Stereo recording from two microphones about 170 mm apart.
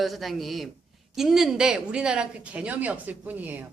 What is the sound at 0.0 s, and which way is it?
A woman's voice, centre (ahead or behind).